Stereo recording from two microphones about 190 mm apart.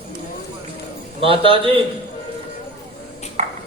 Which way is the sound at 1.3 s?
30° right (ahead or behind).